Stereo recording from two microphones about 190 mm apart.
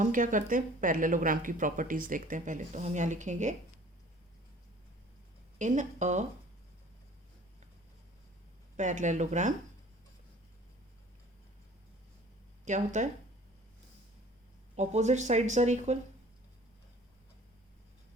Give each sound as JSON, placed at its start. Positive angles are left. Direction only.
{"t": 0.0, "sound": "speech", "side_deg": -45}
{"t": 5.5, "sound": "speech", "side_deg": -40}
{"t": 8.7, "sound": "speech", "side_deg": -40}
{"t": 12.6, "sound": "speech", "side_deg": -40}
{"t": 14.8, "sound": "speech", "side_deg": -35}